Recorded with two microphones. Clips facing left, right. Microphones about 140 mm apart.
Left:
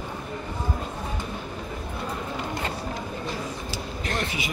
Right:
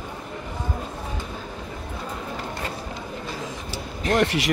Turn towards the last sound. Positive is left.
turn(degrees=-80)